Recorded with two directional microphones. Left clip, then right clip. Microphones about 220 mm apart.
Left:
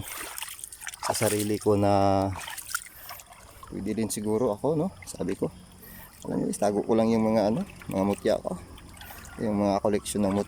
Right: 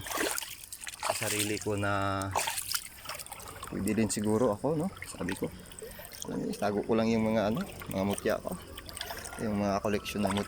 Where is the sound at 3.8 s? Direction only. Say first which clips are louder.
Left 1 dB; 10° left (ahead or behind).